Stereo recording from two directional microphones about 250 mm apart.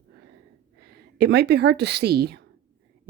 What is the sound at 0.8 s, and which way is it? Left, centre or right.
A woman's voice, right.